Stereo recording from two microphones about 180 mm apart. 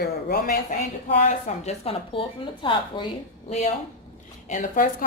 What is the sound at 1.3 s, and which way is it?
A woman's voice, 35° left (ahead or behind).